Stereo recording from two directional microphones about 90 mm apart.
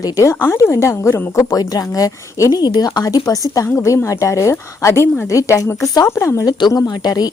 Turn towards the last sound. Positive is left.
turn(degrees=50)  # may be behind; listen again after turning